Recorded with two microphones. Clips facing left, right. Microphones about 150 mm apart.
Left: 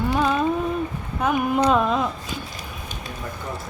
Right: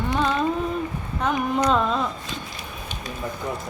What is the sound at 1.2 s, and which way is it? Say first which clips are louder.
Child singing: left 2 dB; 10° left (ahead or behind).